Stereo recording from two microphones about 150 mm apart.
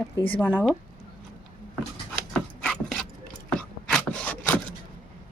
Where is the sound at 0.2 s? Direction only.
10° left (ahead or behind).